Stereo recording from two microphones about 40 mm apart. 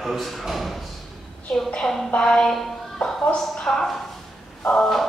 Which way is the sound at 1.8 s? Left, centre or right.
Centre.